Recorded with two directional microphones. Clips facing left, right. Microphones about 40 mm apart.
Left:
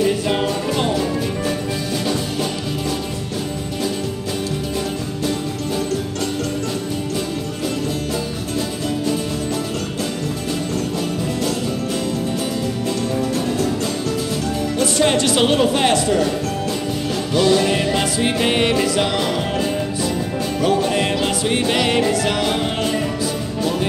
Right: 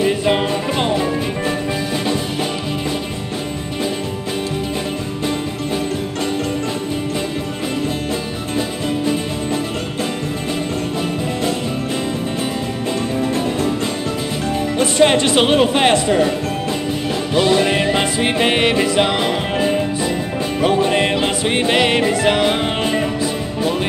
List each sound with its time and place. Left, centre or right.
0.0 s music: right
13.2 s music: right
14.8 s music: right